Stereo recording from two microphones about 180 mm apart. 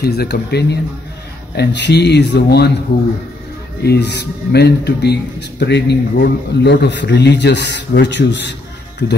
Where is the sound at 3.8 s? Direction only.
70° left (ahead or behind).